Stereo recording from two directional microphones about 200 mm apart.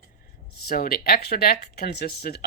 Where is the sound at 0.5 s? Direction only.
50° left (ahead or behind).